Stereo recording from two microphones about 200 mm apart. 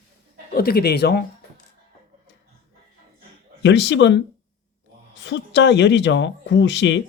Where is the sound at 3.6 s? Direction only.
65° left (ahead or behind).